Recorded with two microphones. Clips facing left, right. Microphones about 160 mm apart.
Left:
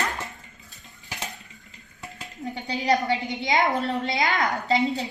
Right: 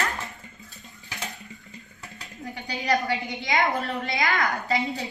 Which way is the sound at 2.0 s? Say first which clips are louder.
Left 5 dB; 25° left (ahead or behind).